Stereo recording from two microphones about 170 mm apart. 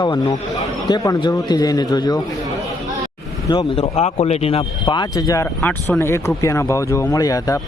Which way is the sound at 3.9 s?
40° left (ahead or behind).